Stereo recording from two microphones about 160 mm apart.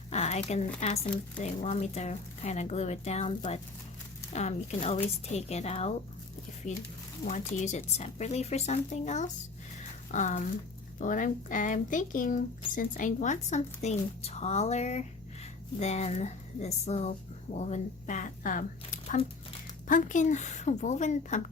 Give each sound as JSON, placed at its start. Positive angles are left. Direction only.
{"t": 0.1, "sound": "a sound", "side_deg": 45}
{"t": 0.8, "sound": "a woman's voice", "side_deg": 40}
{"t": 7.3, "sound": "speech", "side_deg": 50}